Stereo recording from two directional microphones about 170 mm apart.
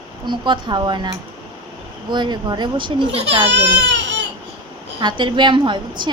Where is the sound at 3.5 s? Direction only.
90° right.